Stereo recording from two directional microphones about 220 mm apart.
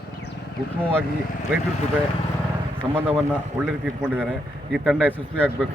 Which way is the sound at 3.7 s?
5° right (ahead or behind).